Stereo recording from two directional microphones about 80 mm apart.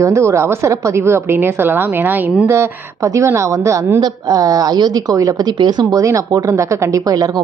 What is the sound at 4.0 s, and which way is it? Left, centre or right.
A woman's voice, right.